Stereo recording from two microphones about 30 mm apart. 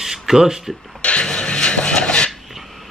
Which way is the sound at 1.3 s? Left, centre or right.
Left.